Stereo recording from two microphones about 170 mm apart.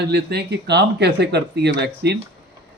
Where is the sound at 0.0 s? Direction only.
75° right (ahead or behind).